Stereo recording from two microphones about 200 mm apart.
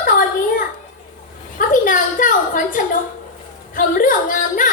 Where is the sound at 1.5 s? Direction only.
45° left (ahead or behind).